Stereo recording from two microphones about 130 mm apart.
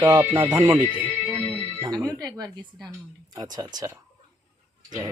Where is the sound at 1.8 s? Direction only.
25° right (ahead or behind).